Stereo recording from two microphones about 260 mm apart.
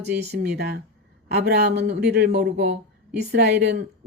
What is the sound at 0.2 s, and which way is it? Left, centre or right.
Speech, right.